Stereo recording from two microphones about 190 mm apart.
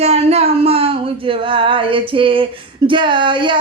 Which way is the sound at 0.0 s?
35° right (ahead or behind).